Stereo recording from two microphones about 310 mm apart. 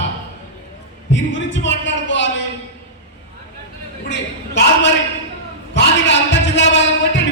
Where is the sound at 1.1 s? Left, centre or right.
Left.